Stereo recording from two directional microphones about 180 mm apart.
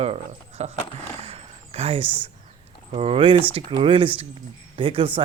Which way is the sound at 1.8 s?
35° right (ahead or behind).